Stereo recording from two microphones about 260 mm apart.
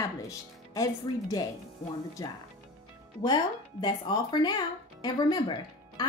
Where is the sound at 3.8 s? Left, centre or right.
Centre.